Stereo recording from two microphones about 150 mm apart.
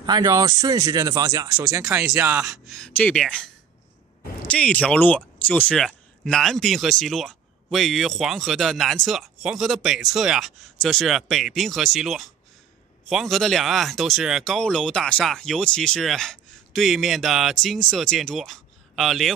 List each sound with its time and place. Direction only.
0.0 s speech: 30° right (ahead or behind)
2.6 s speech: 5° left (ahead or behind)
4.5 s speech: 5° left (ahead or behind)